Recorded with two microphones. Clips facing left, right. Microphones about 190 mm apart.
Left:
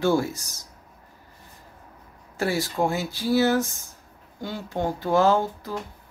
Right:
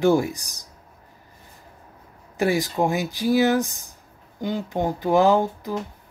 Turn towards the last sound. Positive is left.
turn(degrees=-15)  # may be behind; listen again after turning